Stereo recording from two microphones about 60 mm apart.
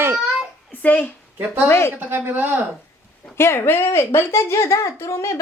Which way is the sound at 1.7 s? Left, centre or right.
Left.